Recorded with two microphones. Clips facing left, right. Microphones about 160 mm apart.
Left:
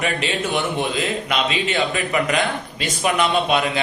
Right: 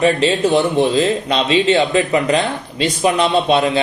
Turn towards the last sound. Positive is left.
turn(degrees=-30)  # may be behind; listen again after turning